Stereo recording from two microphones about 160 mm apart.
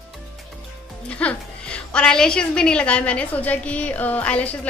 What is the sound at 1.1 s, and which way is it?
A woman's voice, 5° left (ahead or behind).